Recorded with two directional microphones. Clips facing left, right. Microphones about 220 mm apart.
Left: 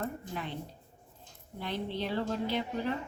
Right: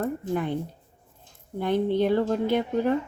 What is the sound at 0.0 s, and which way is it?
Speech, 50° right (ahead or behind).